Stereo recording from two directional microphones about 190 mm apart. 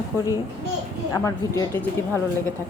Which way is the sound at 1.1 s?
15° left (ahead or behind).